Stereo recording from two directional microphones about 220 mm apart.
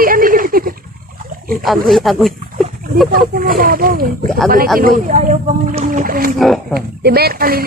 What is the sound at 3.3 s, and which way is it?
Speech, 40° right (ahead or behind).